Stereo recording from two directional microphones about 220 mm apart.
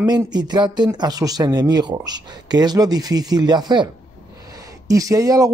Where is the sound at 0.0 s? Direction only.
20° right (ahead or behind).